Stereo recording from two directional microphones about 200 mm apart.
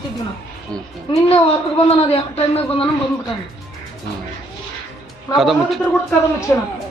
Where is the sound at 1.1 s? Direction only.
25° left (ahead or behind).